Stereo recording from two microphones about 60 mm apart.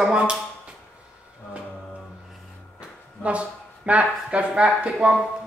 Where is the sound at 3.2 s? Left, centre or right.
Right.